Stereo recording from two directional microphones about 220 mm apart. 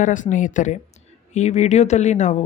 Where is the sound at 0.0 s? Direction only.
35° left (ahead or behind).